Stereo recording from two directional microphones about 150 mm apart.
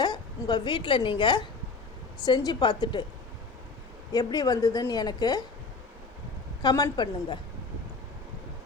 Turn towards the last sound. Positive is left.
turn(degrees=30)  # may be behind; listen again after turning